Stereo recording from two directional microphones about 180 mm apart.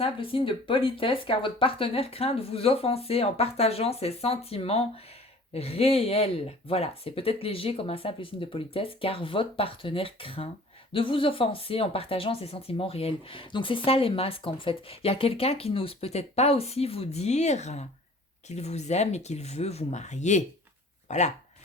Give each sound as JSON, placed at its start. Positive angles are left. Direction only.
{"t": 0.0, "sound": "speech", "side_deg": 30}